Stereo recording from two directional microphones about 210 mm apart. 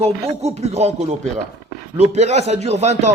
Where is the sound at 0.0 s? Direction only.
30° right (ahead or behind).